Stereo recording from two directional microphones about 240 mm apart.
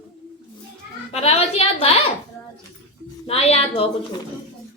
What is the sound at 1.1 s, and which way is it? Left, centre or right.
A woman's voice, left.